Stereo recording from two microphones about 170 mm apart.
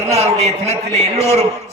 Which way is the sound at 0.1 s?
40° right (ahead or behind).